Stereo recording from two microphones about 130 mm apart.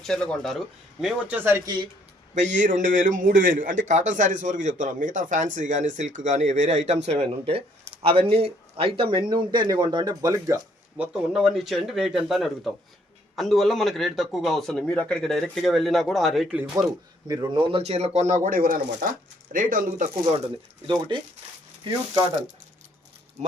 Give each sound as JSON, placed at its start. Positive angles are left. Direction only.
{"t": 0.0, "sound": "speech", "side_deg": 5}
{"t": 1.6, "sound": "speech", "side_deg": -35}
{"t": 2.3, "sound": "speech", "side_deg": -70}
{"t": 10.9, "sound": "speech", "side_deg": -5}
{"t": 17.2, "sound": "speech", "side_deg": -30}
{"t": 20.8, "sound": "speech", "side_deg": -40}